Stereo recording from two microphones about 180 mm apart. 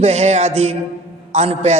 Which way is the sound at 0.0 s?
35° right (ahead or behind).